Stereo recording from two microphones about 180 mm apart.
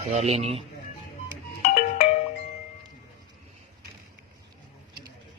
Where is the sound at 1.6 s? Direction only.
35° left (ahead or behind).